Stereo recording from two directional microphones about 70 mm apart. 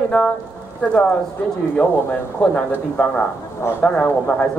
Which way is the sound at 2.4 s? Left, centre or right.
Centre.